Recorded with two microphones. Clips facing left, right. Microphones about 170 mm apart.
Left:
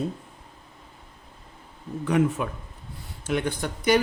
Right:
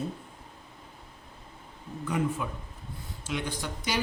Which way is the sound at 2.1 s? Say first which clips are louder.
Left 7 dB; 75° left (ahead or behind).